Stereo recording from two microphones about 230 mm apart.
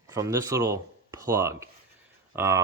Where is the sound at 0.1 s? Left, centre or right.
Centre.